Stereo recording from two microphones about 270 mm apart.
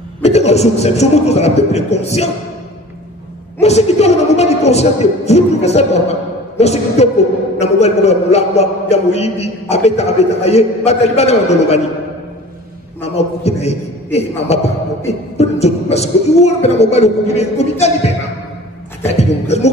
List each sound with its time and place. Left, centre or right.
0.2 s a man's voice: left
3.6 s a man's voice: left
13.0 s a man's voice: left